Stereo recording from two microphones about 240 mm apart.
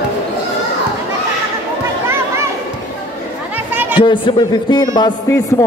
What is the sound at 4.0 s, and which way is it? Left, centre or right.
Speech, left.